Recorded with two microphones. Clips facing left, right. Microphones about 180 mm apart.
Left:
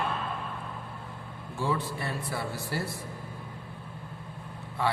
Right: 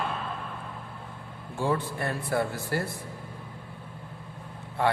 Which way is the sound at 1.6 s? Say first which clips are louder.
Right 3 dB; 50° right (ahead or behind).